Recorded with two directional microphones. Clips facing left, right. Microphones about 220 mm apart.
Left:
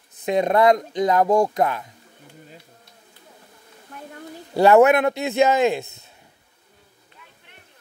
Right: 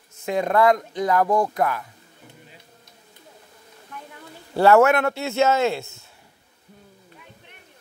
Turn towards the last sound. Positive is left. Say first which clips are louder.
# left 3 dB
turn(degrees=20)  # may be behind; listen again after turning